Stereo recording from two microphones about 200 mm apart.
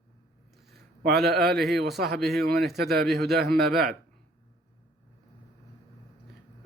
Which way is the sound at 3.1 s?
55° right (ahead or behind).